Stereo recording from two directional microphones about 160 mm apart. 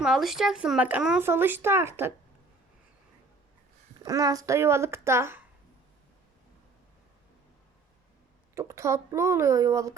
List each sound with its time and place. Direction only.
0.0 s speech: centre (ahead or behind)
4.0 s speech: 20° right (ahead or behind)
8.5 s speech: 15° right (ahead or behind)